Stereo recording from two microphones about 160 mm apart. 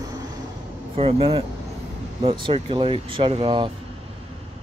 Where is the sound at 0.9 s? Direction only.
35° right (ahead or behind).